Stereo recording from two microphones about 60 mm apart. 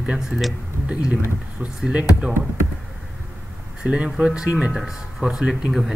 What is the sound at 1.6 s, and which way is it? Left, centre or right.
Speech, centre.